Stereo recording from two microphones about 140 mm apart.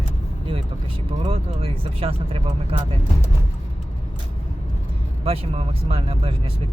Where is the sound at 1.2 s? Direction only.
40° right (ahead or behind).